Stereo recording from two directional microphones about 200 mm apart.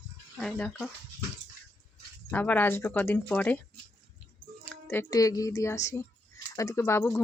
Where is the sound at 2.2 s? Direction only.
5° left (ahead or behind).